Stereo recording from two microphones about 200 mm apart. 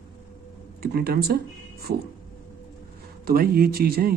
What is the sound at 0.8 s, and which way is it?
Speech, 50° right (ahead or behind).